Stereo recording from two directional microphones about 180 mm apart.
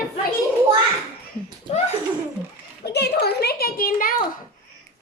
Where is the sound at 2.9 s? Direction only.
65° left (ahead or behind).